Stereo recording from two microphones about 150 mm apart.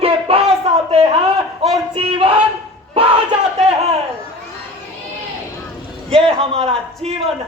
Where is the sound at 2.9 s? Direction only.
35° right (ahead or behind).